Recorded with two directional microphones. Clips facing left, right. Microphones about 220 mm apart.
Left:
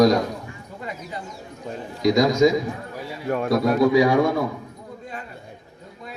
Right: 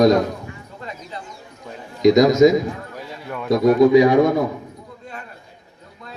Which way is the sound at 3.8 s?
20° right (ahead or behind).